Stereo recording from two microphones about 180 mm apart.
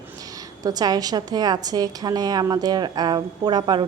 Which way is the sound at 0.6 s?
20° right (ahead or behind).